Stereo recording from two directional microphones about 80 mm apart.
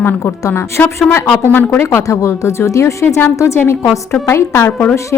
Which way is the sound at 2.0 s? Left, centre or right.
Left.